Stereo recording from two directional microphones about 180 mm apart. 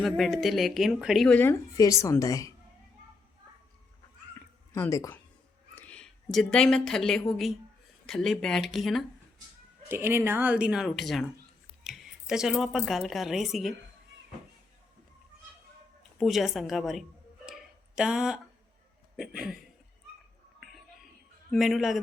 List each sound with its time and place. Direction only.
0.0 s speech: centre (ahead or behind); by 2.5 s 20° left (ahead or behind)
4.7 s a woman's voice: 15° left (ahead or behind); by 9.0 s centre (ahead or behind)
9.9 s speech: 15° right (ahead or behind)
16.1 s speech: centre (ahead or behind)
17.4 s a sound: 5° right (ahead or behind)
19.1 s speech: 5° right (ahead or behind)
21.5 s speech: centre (ahead or behind)